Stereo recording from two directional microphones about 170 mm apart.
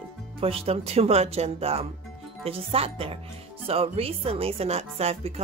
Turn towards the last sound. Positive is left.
turn(degrees=-35)  # may be behind; listen again after turning